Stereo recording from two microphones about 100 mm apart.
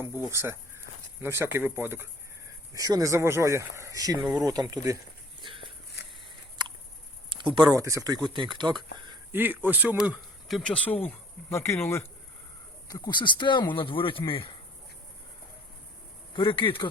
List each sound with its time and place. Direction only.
0.3 s speech: 25° right (ahead or behind)
2.7 s speech: 35° right (ahead or behind)
7.3 s a sound: 50° right (ahead or behind)
7.7 s speech: 30° right (ahead or behind); by 8.8 s 45° right (ahead or behind)
9.3 s speech: 20° right (ahead or behind)
10.0 s speech: 5° right (ahead or behind)
10.6 s speech: 10° left (ahead or behind); by 12.0 s 25° left (ahead or behind)
12.9 s speech: 50° left (ahead or behind)
16.3 s speech: 60° left (ahead or behind)